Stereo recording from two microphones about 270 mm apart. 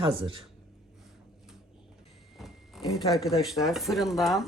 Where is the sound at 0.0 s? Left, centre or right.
Centre.